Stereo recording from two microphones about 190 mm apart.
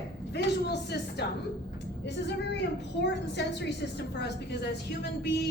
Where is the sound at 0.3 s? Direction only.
60° left (ahead or behind).